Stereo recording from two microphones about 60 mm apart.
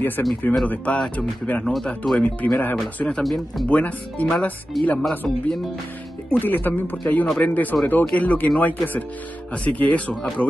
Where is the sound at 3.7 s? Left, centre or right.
Left.